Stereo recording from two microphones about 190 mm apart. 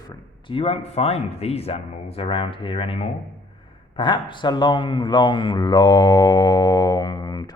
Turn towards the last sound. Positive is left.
turn(degrees=20)  # may be behind; listen again after turning